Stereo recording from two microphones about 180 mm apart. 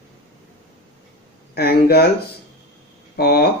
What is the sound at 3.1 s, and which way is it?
Speech, 60° left (ahead or behind).